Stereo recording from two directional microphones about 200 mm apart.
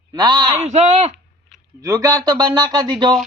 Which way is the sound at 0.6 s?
35° right (ahead or behind).